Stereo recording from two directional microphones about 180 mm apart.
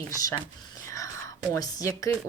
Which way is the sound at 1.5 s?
20° left (ahead or behind).